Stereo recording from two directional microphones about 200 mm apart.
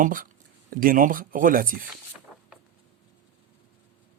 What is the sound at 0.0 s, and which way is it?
Speech, 45° right (ahead or behind).